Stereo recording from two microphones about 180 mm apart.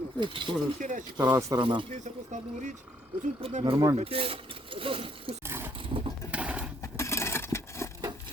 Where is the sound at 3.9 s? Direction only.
30° right (ahead or behind).